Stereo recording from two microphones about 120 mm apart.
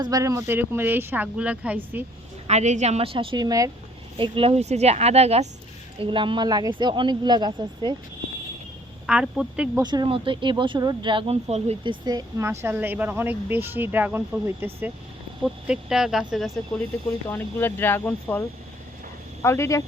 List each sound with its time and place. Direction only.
0.0 s speech: 30° right (ahead or behind); by 2.0 s 15° right (ahead or behind)
2.5 s speech: 75° right (ahead or behind); by 3.7 s 30° right (ahead or behind)
4.2 s a woman's voice: 50° right (ahead or behind)
6.0 s speech: 45° right (ahead or behind)
9.0 s speech: 5° right (ahead or behind)
9.8 s speech: 40° right (ahead or behind); by 11.8 s 60° right (ahead or behind)
11.8 s speech: 40° right (ahead or behind)
12.4 s speech: 20° right (ahead or behind)
15.4 s speech: 5° right (ahead or behind)
17.2 s speech: 20° left (ahead or behind)